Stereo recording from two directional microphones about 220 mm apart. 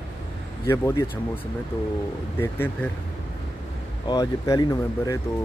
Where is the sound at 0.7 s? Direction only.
10° left (ahead or behind).